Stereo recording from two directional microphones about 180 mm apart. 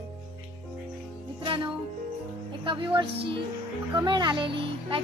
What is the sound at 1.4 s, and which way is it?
A woman's voice, 30° right (ahead or behind).